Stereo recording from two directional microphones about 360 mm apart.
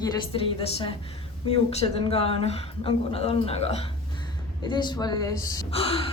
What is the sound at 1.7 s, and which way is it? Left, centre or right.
Speech, centre.